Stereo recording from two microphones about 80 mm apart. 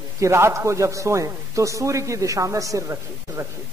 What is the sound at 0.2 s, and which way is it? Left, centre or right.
A man's voice, right.